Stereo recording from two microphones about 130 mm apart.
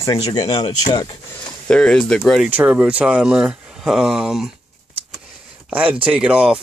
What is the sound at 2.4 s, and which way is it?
Speech, 15° right (ahead or behind).